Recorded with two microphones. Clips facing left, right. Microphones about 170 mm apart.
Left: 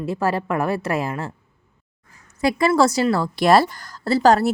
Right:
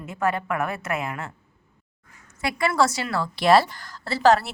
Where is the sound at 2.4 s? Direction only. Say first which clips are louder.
Left 5 dB; 35° left (ahead or behind).